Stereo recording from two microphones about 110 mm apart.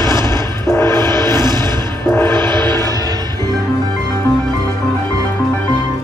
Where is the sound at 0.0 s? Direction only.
25° left (ahead or behind).